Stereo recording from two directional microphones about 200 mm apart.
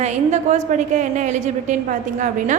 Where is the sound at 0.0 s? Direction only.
35° right (ahead or behind).